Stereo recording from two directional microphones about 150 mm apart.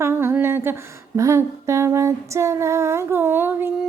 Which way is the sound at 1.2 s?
20° right (ahead or behind).